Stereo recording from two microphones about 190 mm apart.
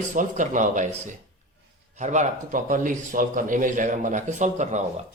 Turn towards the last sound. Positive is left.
turn(degrees=-40)  # may be behind; listen again after turning